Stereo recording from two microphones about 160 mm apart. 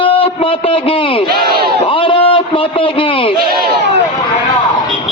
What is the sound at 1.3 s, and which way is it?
Battle cry, 75° right (ahead or behind).